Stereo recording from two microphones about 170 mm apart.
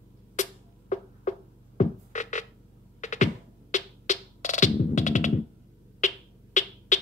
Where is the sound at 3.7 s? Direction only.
45° left (ahead or behind).